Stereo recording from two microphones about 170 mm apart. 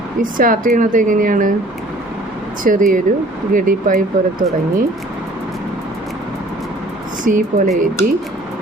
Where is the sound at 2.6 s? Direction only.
50° right (ahead or behind).